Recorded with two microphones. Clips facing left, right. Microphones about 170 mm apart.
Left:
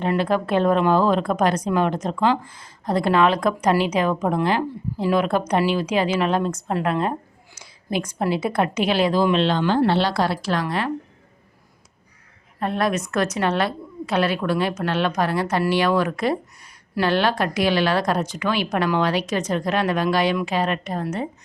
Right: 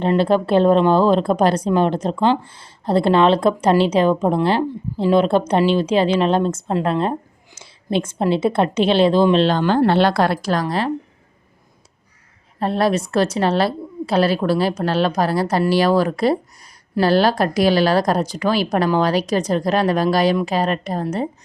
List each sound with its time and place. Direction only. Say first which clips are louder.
0.0 s speech: right 5 dB; 30° right (ahead or behind)
12.5 s a woman's voice: right 4 dB; 30° right (ahead or behind)